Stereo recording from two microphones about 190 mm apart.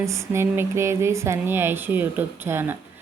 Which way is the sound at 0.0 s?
15° right (ahead or behind).